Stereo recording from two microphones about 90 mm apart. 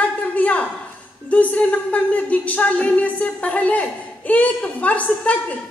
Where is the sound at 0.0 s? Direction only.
15° left (ahead or behind).